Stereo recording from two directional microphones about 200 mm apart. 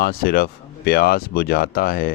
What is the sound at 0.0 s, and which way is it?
Speech, 50° left (ahead or behind).